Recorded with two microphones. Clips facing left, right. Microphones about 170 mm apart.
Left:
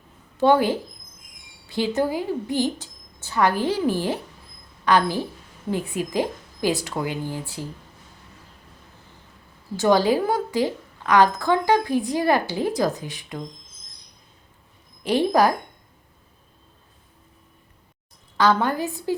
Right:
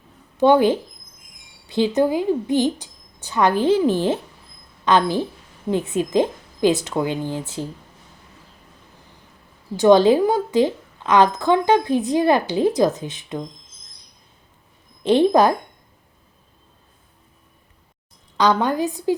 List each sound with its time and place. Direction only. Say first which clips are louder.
0.3 s a woman's voice: right 3 dB; 20° right (ahead or behind)
9.7 s a woman's voice: right 6 dB; 20° right (ahead or behind)
15.0 s a woman's voice: right 4 dB; 25° right (ahead or behind)
18.3 s a woman's voice: right 2 dB; 20° right (ahead or behind)